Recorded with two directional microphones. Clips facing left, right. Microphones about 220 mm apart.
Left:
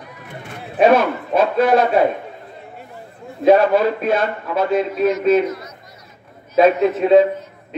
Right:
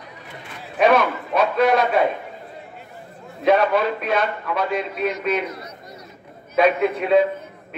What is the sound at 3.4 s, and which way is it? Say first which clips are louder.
A man's voice: left 5 dB; 30° left (ahead or behind).